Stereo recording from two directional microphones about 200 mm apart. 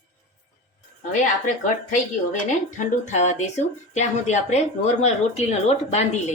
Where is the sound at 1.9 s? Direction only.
40° left (ahead or behind).